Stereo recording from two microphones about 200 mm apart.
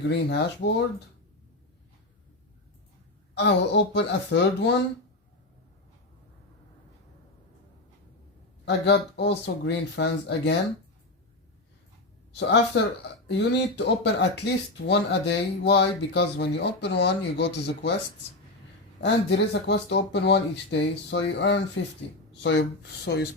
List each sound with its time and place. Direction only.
0.1 s speech: 60° left (ahead or behind)
3.3 s speech: 60° left (ahead or behind)
8.6 s speech: 60° left (ahead or behind)
12.3 s speech: 60° left (ahead or behind)
19.0 s speech: 60° left (ahead or behind)